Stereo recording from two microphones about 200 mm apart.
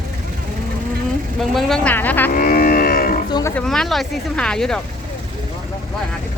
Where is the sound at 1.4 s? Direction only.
Centre (ahead or behind).